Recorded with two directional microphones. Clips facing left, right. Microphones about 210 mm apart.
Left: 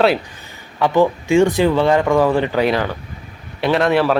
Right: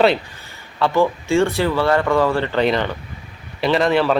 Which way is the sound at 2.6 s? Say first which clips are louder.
Left 1 dB; 5° left (ahead or behind).